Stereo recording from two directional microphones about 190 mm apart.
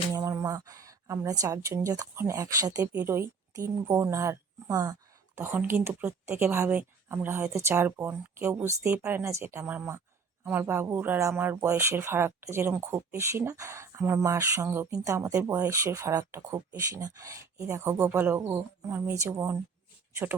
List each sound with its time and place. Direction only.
0.1 s a woman's voice: 15° right (ahead or behind)